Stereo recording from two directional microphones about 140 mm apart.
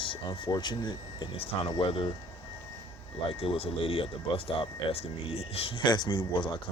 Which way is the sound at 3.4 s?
40° left (ahead or behind).